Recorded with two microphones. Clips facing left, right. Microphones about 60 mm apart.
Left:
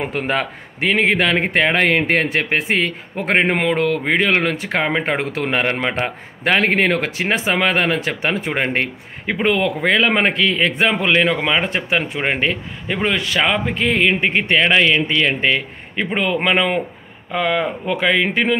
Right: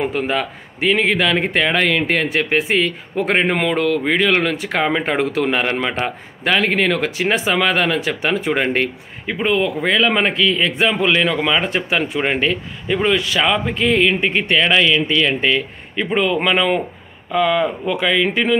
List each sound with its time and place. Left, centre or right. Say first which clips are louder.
0.1 s a man's voice: even; left
9.2 s speech: even; left
9.8 s a man's voice: even; left
13.4 s a man's voice: right 1 dB; left